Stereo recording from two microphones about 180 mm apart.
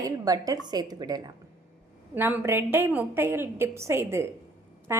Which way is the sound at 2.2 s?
10° right (ahead or behind).